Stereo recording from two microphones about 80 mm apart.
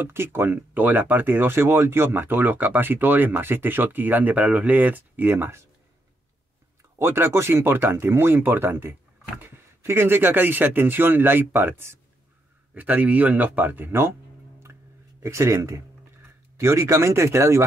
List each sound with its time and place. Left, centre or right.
0.0 s speech: right
7.0 s speech: right
15.2 s speech: right